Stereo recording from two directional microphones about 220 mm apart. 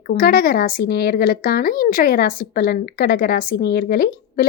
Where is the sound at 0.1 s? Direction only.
40° left (ahead or behind).